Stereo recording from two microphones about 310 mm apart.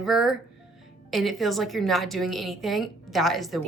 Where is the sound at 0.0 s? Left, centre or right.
Centre.